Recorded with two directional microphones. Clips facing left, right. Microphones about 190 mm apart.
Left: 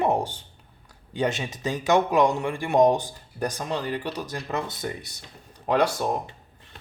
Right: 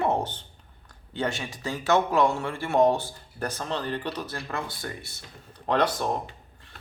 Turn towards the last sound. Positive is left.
turn(degrees=10)  # may be behind; listen again after turning